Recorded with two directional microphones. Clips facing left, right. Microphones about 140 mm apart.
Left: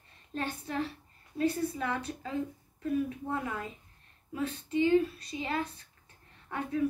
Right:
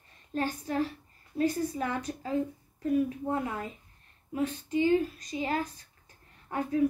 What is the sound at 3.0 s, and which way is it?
Child singing, 30° right (ahead or behind).